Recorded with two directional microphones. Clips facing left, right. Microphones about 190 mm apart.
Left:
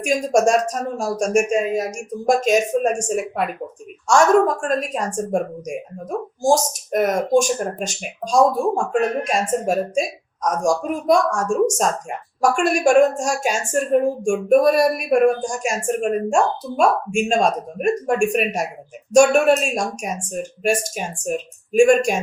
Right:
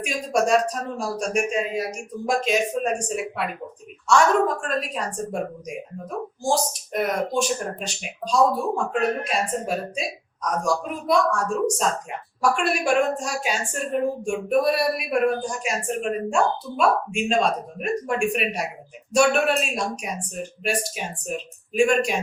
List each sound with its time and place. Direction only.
0.0 s a woman's voice: 45° left (ahead or behind)